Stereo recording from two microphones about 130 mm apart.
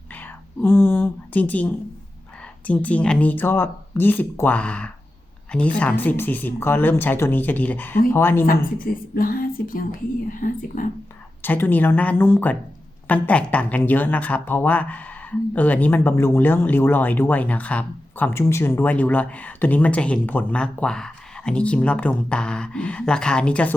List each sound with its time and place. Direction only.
0.1 s whispering: 15° left (ahead or behind)
2.6 s speech: 10° left (ahead or behind)
8.8 s speech: 90° left
11.4 s speech: 15° left (ahead or behind)